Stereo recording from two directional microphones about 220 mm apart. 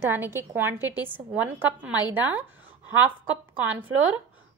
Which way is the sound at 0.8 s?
15° left (ahead or behind).